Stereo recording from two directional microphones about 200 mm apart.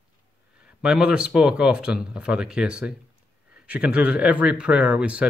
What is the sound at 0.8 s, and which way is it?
Speech, 5° right (ahead or behind).